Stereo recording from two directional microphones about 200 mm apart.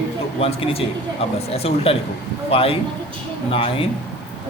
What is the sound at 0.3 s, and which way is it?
A man's voice, 30° left (ahead or behind).